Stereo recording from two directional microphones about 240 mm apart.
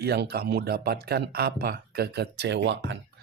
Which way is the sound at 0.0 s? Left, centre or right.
Right.